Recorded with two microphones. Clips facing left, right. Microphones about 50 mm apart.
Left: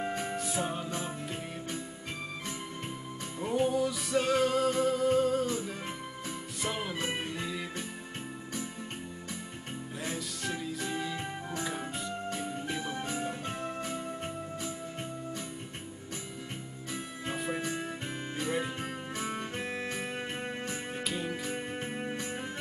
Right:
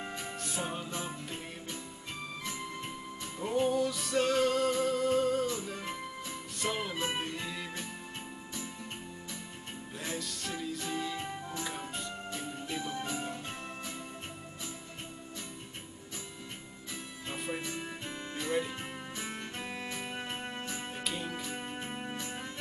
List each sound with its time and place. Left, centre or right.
0.0 s music: left
0.5 s music: centre
3.3 s music: centre
6.6 s music: centre
10.0 s music: centre
12.6 s music: left
17.6 s music: left
21.1 s music: centre